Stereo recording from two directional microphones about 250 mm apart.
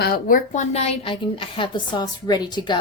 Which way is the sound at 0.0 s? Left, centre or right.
Left.